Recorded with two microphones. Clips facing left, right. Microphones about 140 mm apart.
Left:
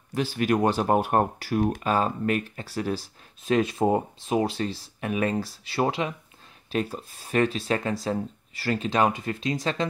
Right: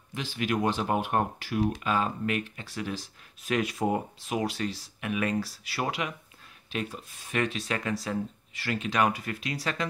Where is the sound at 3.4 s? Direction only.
25° left (ahead or behind).